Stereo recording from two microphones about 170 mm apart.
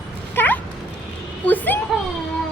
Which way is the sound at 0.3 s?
10° left (ahead or behind).